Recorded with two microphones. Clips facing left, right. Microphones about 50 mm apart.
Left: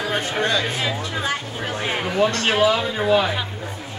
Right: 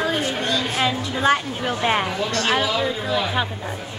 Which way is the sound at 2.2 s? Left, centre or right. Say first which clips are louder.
Left 3 dB; left.